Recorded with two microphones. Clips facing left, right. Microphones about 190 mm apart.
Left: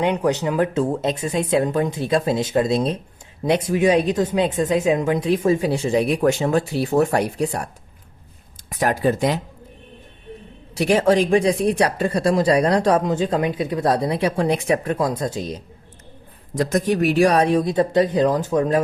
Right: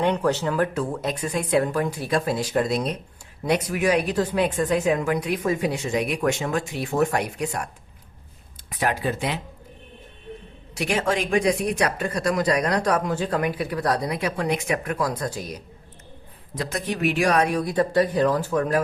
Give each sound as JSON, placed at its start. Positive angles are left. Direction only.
{"t": 0.0, "sound": "speech", "side_deg": 15}
{"t": 8.7, "sound": "speech", "side_deg": 45}
{"t": 10.8, "sound": "speech", "side_deg": 35}
{"t": 16.6, "sound": "speech", "side_deg": 45}